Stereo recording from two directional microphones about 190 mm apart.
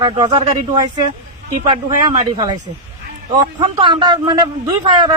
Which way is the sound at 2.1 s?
25° right (ahead or behind).